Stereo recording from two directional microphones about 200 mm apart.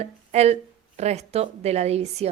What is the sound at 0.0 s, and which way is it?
A woman's voice, 30° right (ahead or behind).